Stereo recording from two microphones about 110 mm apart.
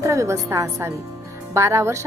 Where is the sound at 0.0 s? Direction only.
25° right (ahead or behind).